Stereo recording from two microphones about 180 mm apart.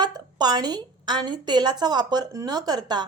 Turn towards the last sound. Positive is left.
turn(degrees=-25)  # may be behind; listen again after turning